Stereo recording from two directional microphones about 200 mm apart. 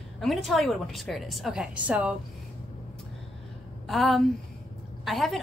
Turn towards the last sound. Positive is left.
turn(degrees=0)  # may be behind; listen again after turning